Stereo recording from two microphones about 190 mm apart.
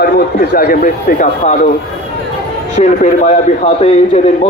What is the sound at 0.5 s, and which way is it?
Speech, 45° left (ahead or behind).